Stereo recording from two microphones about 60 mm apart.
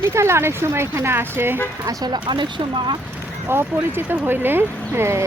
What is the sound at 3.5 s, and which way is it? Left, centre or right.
Speech, right.